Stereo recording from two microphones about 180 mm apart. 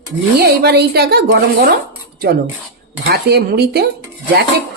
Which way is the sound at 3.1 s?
65° right (ahead or behind).